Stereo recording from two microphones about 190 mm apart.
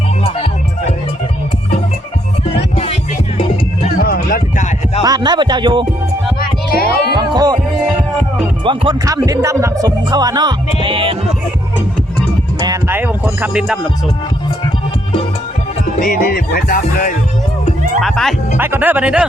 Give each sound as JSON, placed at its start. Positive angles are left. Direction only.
{"t": 0.2, "sound": "music", "side_deg": 30}
{"t": 2.5, "sound": "music", "side_deg": 30}
{"t": 3.9, "sound": "music", "side_deg": 50}
{"t": 5.0, "sound": "speech", "side_deg": -20}
{"t": 6.4, "sound": "music", "side_deg": 50}
{"t": 7.1, "sound": "music", "side_deg": -20}
{"t": 8.6, "sound": "speech", "side_deg": -25}
{"t": 12.5, "sound": "music", "side_deg": -20}
{"t": 12.9, "sound": "speech", "side_deg": -10}
{"t": 16.0, "sound": "music", "side_deg": 50}
{"t": 18.0, "sound": "speech", "side_deg": 0}
{"t": 18.5, "sound": "speech", "side_deg": -10}